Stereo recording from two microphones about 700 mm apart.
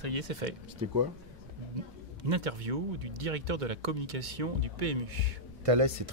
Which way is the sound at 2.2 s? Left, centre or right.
Right.